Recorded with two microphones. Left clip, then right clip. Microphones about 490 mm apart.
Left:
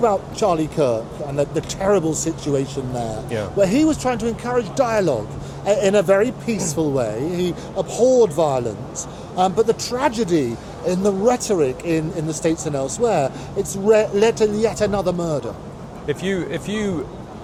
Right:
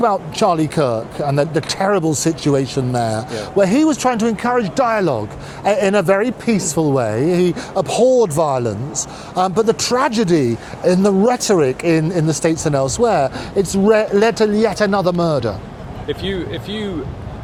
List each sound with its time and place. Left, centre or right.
0.0 s speech: right
16.0 s speech: left